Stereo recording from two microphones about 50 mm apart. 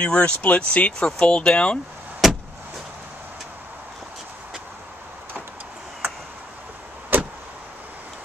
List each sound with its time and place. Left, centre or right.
0.0 s speech: left
2.2 s vehicle: centre
7.1 s vehicle: right